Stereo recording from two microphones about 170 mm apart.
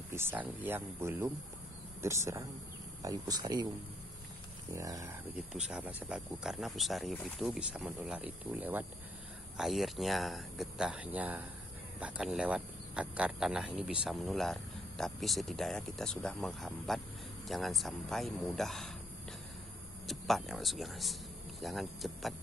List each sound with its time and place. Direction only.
0.1 s speech: 15° right (ahead or behind)
4.7 s speech: 20° right (ahead or behind)
5.3 s speech: 5° right (ahead or behind)
20.1 s speech: centre (ahead or behind)